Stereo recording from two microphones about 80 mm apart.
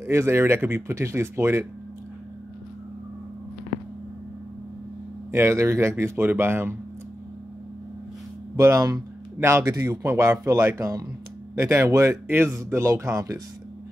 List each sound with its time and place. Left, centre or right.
0.0 s a man's voice: right
5.3 s a man's voice: right
8.5 s a man's voice: right